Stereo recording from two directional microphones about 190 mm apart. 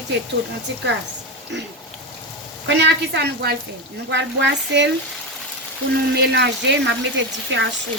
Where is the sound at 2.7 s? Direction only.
65° right (ahead or behind).